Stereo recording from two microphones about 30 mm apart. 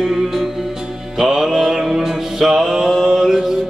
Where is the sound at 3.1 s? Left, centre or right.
Centre.